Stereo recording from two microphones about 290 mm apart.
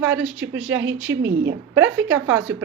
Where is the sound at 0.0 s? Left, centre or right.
Centre.